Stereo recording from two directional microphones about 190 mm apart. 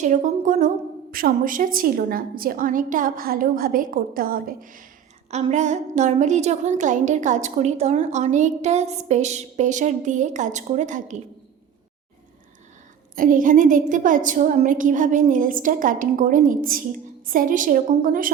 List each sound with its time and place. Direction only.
0.0 s a woman's voice: 40° right (ahead or behind)
13.1 s a woman's voice: 45° right (ahead or behind)